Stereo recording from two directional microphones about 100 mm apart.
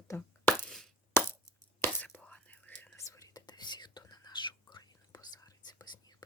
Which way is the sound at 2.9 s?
30° left (ahead or behind).